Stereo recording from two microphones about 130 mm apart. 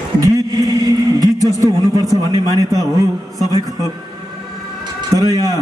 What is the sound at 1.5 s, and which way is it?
Speech, 25° right (ahead or behind).